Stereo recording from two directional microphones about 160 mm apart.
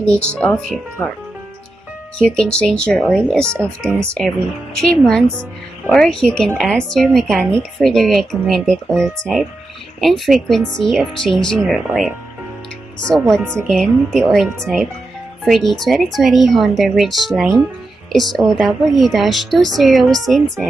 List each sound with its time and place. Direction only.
0.0 s speech: 5° left (ahead or behind)
2.1 s speech: 5° left (ahead or behind)
3.5 s speech: 15° right (ahead or behind)
4.7 s speech: 5° left (ahead or behind)
13.4 s speech: 15° right (ahead or behind)
13.7 s speech: 5° left (ahead or behind)